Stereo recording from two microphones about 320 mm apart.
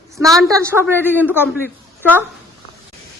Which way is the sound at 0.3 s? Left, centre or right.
Centre.